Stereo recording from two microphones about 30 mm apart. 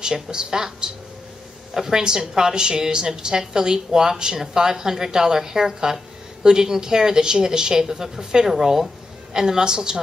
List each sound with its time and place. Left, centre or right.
0.0 s a woman's voice: right